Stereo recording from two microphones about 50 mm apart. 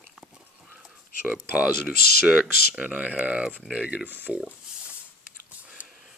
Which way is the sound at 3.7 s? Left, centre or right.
Centre.